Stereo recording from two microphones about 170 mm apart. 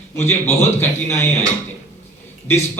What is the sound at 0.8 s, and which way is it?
Speech, 15° left (ahead or behind).